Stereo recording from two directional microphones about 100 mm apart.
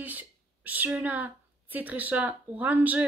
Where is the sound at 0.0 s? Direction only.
15° right (ahead or behind).